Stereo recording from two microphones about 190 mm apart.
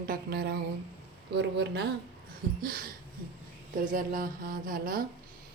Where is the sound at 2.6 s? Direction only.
50° right (ahead or behind).